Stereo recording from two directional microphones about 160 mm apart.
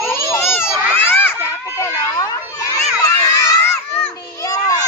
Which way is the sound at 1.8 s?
20° left (ahead or behind).